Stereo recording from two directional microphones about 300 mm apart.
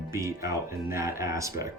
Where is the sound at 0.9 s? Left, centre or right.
Centre.